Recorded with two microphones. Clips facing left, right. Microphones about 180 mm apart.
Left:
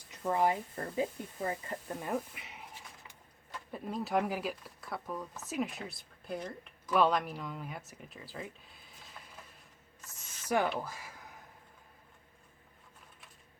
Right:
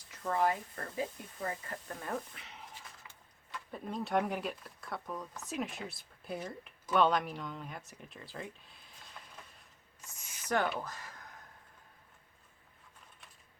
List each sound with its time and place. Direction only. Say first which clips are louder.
0.1 s speech: left 2 dB; 20° left (ahead or behind)
3.7 s speech: left 1 dB; 5° left (ahead or behind)
10.5 s speech: left 2 dB; 10° left (ahead or behind)